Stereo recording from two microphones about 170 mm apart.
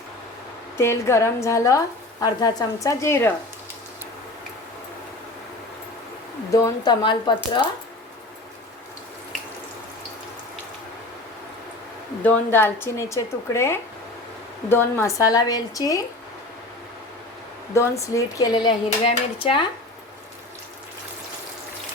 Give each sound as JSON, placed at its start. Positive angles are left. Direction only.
{"t": 0.8, "sound": "speech", "side_deg": 15}
{"t": 6.5, "sound": "speech", "side_deg": 20}
{"t": 12.2, "sound": "speech", "side_deg": 10}
{"t": 17.7, "sound": "speech", "side_deg": 20}